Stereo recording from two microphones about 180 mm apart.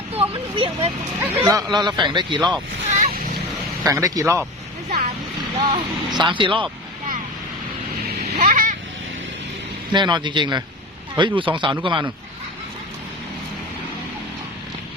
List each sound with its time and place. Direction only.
0.2 s speech: 30° right (ahead or behind)
1.2 s speech: 15° right (ahead or behind)
2.9 s a sound: 45° right (ahead or behind)
3.8 s speech: 20° right (ahead or behind)
5.5 s speech: 30° right (ahead or behind)
8.4 s vehicle: 50° right (ahead or behind)
9.9 s speech: 25° right (ahead or behind)